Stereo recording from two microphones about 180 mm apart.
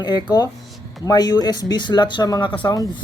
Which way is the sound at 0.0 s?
25° left (ahead or behind).